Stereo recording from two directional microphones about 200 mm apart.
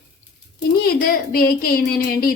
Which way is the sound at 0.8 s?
45° left (ahead or behind).